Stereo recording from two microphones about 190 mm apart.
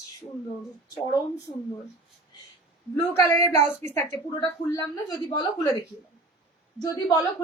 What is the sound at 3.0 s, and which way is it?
A woman's voice, 15° left (ahead or behind).